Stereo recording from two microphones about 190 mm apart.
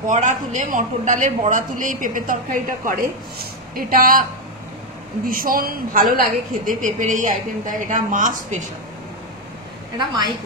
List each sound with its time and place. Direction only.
0.0 s a woman's voice: 40° right (ahead or behind)
9.9 s a woman's voice: 25° right (ahead or behind)